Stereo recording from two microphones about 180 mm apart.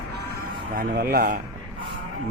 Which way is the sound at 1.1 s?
55° right (ahead or behind).